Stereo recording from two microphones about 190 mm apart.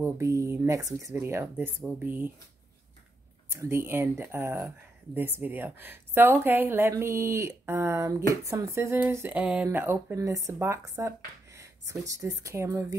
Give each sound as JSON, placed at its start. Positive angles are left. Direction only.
{"t": 0.0, "sound": "speech", "side_deg": -15}
{"t": 3.4, "sound": "speech", "side_deg": -15}